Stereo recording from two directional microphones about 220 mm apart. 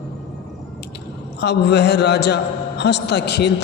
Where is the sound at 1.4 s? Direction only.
50° left (ahead or behind).